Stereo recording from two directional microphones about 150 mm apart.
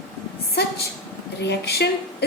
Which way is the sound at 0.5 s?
90° left.